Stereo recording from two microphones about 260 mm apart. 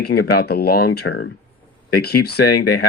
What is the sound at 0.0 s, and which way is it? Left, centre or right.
Speech, left.